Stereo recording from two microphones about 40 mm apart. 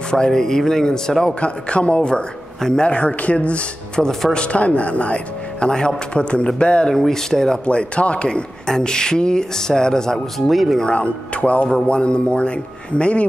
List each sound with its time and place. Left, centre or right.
0.1 s speech: centre
1.4 s speech: left
4.0 s speech: centre
4.3 s speech: left
4.6 s speech: left
5.7 s speech: centre
7.1 s speech: centre
7.6 s speech: left
8.6 s speech: centre
10.1 s speech: centre
10.9 s speech: left